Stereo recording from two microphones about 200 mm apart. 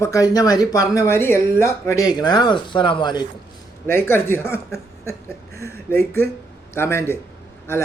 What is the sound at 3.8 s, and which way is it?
Speech, 10° left (ahead or behind).